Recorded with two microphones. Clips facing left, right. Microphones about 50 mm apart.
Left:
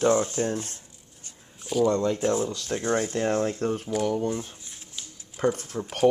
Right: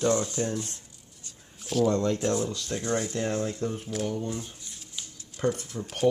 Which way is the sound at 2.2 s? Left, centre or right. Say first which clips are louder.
Left 2 dB; left.